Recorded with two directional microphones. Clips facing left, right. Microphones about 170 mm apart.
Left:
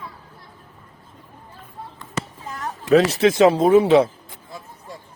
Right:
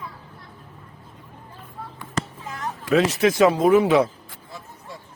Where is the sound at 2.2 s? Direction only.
5° left (ahead or behind).